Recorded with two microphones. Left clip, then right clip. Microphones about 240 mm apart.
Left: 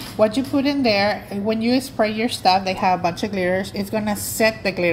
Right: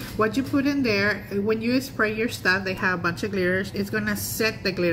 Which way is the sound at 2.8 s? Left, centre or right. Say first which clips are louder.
Left 5 dB; left.